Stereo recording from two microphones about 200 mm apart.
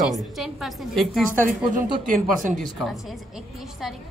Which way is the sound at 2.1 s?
40° right (ahead or behind).